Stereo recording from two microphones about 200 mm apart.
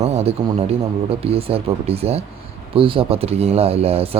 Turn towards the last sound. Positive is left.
turn(degrees=-30)  # may be behind; listen again after turning